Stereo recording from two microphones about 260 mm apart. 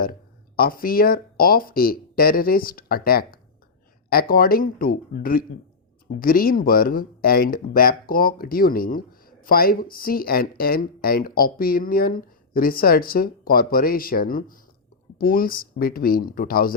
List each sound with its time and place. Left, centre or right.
0.0 s speech: left